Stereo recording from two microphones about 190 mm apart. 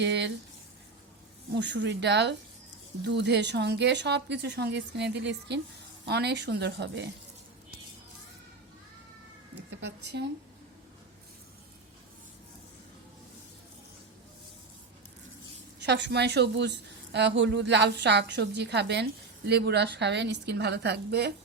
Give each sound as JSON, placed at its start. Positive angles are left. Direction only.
{"t": 0.0, "sound": "speech", "side_deg": -65}
{"t": 1.5, "sound": "speech", "side_deg": -65}
{"t": 9.8, "sound": "speech", "side_deg": -65}
{"t": 15.9, "sound": "speech", "side_deg": -65}